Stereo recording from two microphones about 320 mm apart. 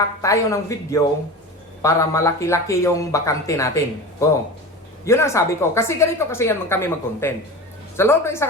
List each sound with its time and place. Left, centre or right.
0.2 s a woman's voice: centre
5.0 s a woman's voice: centre